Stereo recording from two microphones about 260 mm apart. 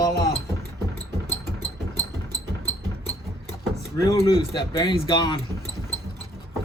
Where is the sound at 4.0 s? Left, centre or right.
Centre.